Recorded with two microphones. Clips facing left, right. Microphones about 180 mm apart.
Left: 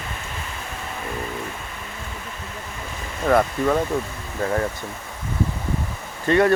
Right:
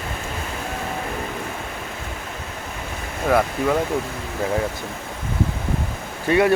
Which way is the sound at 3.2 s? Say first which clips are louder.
Left 1 dB; 5° right (ahead or behind).